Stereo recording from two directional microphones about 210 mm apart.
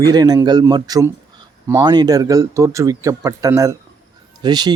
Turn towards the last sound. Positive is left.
turn(degrees=-20)  # may be behind; listen again after turning